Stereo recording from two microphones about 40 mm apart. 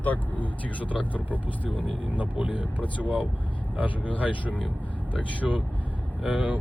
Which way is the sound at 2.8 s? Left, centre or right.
Left.